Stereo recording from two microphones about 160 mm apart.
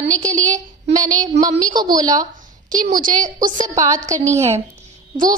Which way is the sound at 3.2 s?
55° right (ahead or behind).